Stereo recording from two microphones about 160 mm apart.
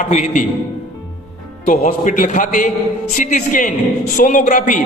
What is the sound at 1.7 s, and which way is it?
A woman's voice, 55° left (ahead or behind).